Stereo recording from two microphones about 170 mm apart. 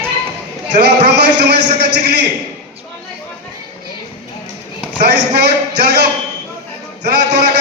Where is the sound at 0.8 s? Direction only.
75° right (ahead or behind).